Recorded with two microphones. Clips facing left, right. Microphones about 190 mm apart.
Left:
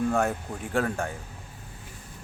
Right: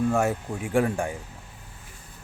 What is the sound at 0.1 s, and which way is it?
A man's voice, 10° right (ahead or behind).